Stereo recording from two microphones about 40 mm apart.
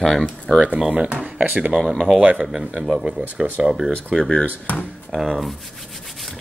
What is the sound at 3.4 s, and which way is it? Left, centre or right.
Speech, centre.